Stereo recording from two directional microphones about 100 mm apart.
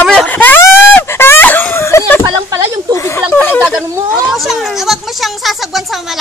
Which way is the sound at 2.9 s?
30° left (ahead or behind).